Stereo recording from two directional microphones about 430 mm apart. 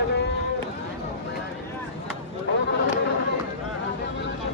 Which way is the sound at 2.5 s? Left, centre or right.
Left.